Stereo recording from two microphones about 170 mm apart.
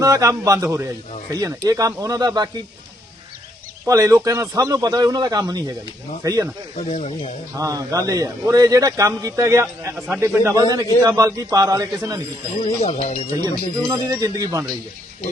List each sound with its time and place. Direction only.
0.0 s a man's voice: 20° right (ahead or behind)
3.8 s a man's voice: 20° right (ahead or behind)
6.7 s speech: 45° left (ahead or behind)
7.6 s a man's voice: 20° right (ahead or behind)
12.6 s speech: 40° left (ahead or behind)
13.3 s a man's voice: 20° right (ahead or behind)